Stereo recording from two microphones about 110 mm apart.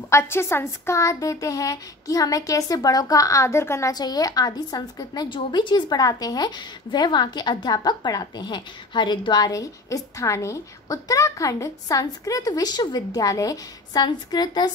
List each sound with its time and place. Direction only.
0.1 s a woman's voice: 25° left (ahead or behind)
3.9 s a woman's voice: 35° left (ahead or behind)